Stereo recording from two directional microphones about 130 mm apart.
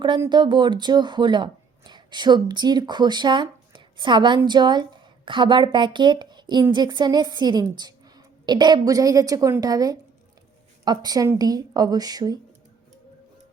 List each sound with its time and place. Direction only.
0.3 s a woman's voice: 35° right (ahead or behind)